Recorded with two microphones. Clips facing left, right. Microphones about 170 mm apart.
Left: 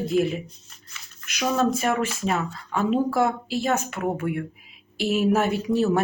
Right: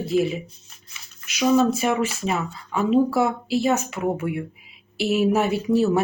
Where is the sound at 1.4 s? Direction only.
5° right (ahead or behind).